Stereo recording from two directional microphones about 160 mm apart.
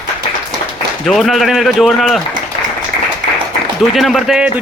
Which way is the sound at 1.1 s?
Centre (ahead or behind).